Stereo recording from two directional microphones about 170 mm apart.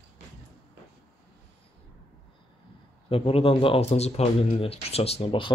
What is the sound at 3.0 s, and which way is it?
A man's voice, 35° left (ahead or behind).